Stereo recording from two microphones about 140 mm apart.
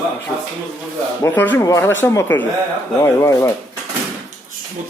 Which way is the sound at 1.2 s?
15° left (ahead or behind).